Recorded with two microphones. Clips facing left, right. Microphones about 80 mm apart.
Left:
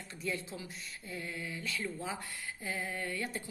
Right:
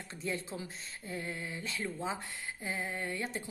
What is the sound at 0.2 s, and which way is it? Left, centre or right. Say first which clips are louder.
A woman's voice: right 1 dB; right.